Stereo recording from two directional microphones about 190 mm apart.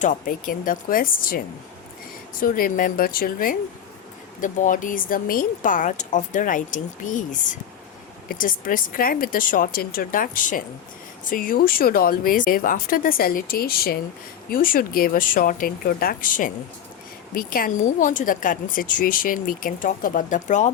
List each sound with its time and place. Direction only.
0.0 s speech: 45° left (ahead or behind)
2.4 s speech: 50° left (ahead or behind)
8.3 s speech: 45° left (ahead or behind)